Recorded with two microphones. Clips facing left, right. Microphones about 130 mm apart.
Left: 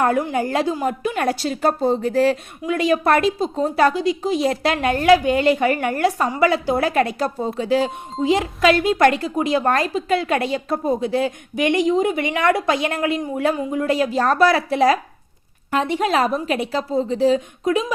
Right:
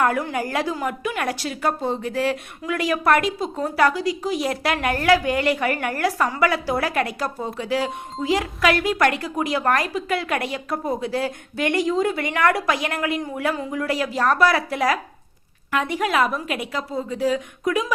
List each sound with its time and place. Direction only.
0.0 s a woman's voice: 25° left (ahead or behind)